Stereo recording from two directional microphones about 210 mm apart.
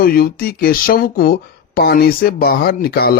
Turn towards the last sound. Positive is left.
turn(degrees=45)  # may be behind; listen again after turning